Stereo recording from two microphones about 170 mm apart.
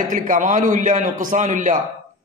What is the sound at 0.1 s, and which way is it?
A man's voice, 50° right (ahead or behind).